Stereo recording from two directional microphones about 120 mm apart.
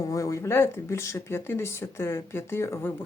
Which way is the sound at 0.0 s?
25° left (ahead or behind).